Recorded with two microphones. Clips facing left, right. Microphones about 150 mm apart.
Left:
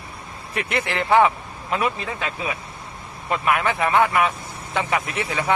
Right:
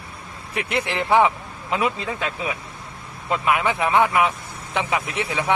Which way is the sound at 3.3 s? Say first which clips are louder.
Even; 15° right (ahead or behind).